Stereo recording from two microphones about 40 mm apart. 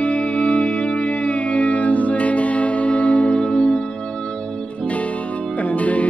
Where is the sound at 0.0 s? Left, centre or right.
Left.